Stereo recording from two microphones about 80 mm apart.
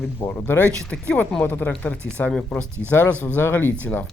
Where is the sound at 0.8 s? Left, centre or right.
Centre.